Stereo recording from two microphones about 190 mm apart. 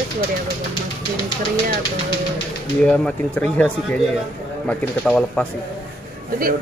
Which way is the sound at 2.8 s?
5° left (ahead or behind).